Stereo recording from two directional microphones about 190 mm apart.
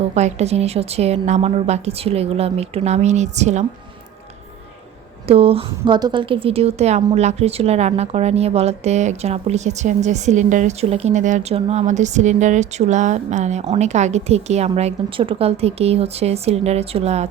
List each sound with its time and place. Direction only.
0.1 s a woman's voice: 35° right (ahead or behind)
5.3 s a woman's voice: 30° right (ahead or behind)